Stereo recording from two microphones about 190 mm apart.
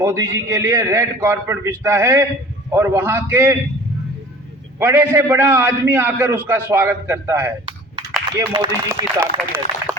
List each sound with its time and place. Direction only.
0.0 s a man's voice: 15° right (ahead or behind)
4.8 s a man's voice: 10° right (ahead or behind)
8.5 s a man's voice: 20° right (ahead or behind)